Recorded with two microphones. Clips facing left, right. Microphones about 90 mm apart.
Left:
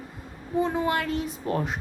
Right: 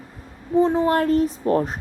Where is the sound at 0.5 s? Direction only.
30° right (ahead or behind).